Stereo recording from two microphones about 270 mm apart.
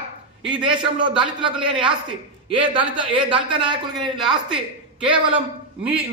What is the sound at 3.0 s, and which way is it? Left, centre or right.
A woman's voice, centre.